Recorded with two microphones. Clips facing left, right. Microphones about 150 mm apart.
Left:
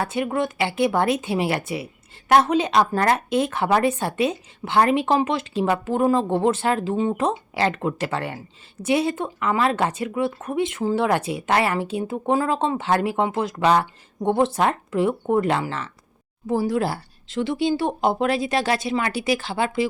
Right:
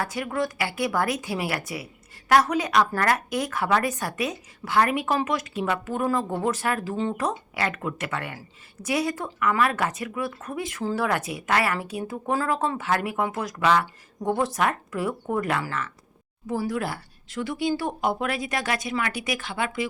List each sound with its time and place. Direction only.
0.0 s speech: 25° left (ahead or behind)